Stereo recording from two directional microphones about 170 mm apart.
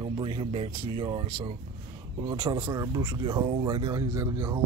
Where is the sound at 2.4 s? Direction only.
20° right (ahead or behind).